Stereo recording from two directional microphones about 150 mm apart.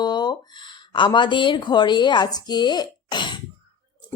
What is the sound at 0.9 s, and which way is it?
A woman's voice, 30° left (ahead or behind).